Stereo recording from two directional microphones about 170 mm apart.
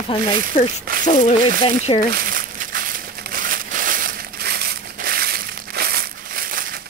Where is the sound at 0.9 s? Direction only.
60° right (ahead or behind).